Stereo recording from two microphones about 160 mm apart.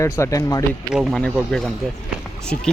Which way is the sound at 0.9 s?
Centre (ahead or behind).